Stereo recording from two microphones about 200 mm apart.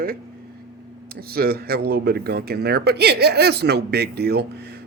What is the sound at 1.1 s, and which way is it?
Speech, 50° right (ahead or behind).